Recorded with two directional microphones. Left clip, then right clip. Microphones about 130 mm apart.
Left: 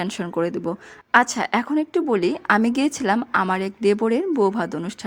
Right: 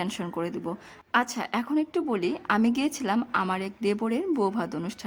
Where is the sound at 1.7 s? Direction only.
30° left (ahead or behind).